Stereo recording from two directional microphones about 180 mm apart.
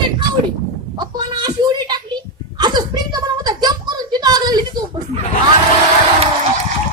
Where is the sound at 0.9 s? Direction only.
20° right (ahead or behind).